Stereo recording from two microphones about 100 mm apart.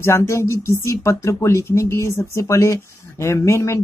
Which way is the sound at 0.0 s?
25° left (ahead or behind).